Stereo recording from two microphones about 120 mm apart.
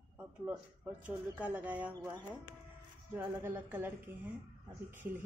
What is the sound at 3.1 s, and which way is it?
Speech, 20° right (ahead or behind).